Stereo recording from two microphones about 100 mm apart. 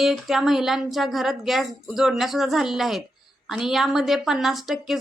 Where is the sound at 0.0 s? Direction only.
5° right (ahead or behind).